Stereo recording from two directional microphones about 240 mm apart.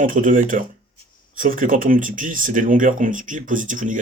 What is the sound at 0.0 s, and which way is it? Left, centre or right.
Speech, right.